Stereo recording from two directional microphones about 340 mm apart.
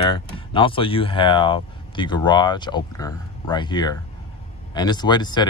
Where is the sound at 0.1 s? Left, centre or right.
Centre.